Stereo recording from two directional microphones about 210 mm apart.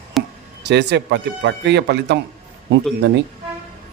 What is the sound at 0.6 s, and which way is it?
Speech, 55° right (ahead or behind).